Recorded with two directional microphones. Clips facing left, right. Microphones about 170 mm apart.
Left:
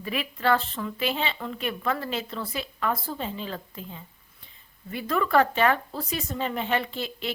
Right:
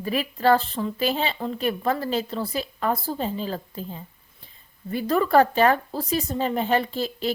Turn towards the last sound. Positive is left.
turn(degrees=-40)  # may be behind; listen again after turning